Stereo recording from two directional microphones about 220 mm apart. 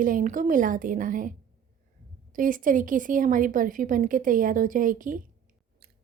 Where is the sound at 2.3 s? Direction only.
40° right (ahead or behind).